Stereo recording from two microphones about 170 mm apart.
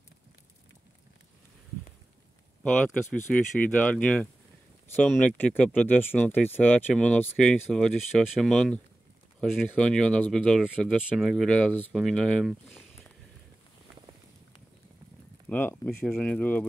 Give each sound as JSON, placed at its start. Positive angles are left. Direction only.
{"t": 2.6, "sound": "speech", "side_deg": 5}
{"t": 15.4, "sound": "speech", "side_deg": 10}